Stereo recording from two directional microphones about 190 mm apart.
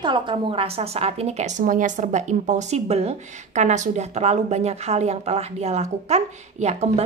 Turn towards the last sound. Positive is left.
turn(degrees=-35)  # may be behind; listen again after turning